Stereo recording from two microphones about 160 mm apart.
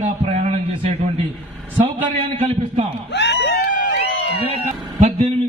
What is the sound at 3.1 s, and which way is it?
Speech, 90° left.